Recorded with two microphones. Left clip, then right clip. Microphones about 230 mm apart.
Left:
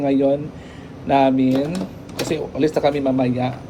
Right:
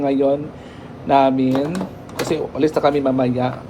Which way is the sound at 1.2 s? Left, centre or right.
Right.